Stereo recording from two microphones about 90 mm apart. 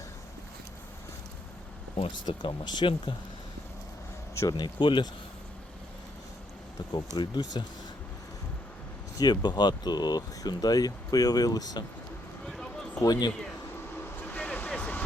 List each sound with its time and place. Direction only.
2.0 s speech: 60° left (ahead or behind)
4.4 s speech: 45° left (ahead or behind)
7.2 s speech: 50° left (ahead or behind)
9.1 s speech: 50° left (ahead or behind)
12.5 s a sound: 5° left (ahead or behind)
13.0 s speech: 50° left (ahead or behind)
14.0 s vehicle: 20° left (ahead or behind)